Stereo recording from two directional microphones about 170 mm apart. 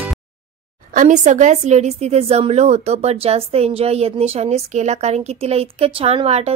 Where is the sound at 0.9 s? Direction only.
45° right (ahead or behind).